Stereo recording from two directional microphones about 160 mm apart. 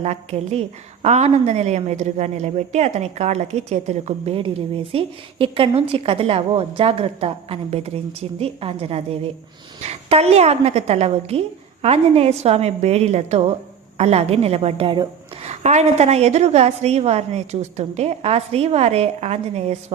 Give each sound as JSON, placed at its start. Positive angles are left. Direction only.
{"t": 0.0, "sound": "a woman's voice", "side_deg": -45}